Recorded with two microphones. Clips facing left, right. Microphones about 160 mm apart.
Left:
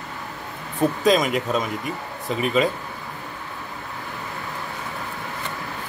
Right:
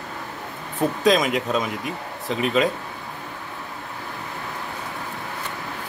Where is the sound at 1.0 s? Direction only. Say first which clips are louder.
Right 1 dB; centre (ahead or behind).